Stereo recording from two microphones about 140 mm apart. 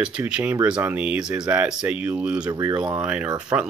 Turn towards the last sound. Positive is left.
turn(degrees=-20)  # may be behind; listen again after turning